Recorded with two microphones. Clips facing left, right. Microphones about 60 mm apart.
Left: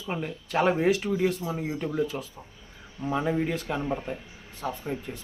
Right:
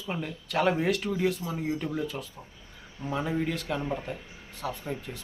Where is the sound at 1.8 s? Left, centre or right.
Centre.